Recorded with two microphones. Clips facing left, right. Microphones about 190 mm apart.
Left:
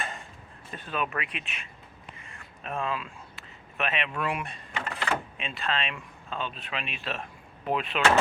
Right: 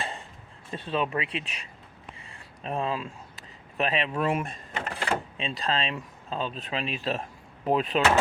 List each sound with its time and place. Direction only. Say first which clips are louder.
0.7 s speech: right 4 dB; 25° right (ahead or behind)